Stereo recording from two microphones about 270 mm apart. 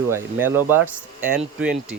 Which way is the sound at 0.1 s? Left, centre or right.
Centre.